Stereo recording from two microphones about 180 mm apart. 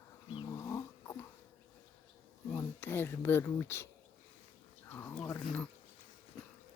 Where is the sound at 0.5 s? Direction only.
15° left (ahead or behind).